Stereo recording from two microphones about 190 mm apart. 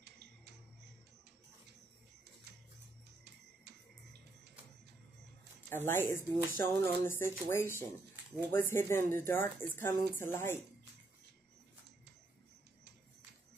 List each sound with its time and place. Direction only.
0.0 s music: 60° right (ahead or behind)
5.7 s speech: 10° left (ahead or behind)